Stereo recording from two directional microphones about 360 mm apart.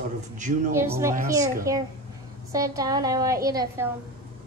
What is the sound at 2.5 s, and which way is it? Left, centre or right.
A woman's voice, centre.